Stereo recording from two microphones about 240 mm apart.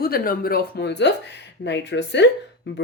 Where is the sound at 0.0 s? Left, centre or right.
Left.